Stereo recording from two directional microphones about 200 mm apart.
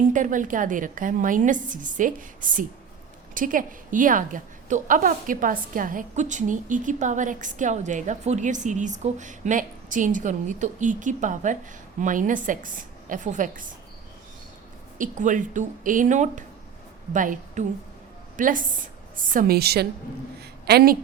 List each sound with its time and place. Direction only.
0.1 s a woman's voice: 40° right (ahead or behind)
14.9 s a woman's voice: 40° right (ahead or behind)